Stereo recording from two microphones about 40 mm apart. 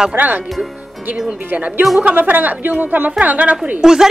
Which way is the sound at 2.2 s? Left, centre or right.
Right.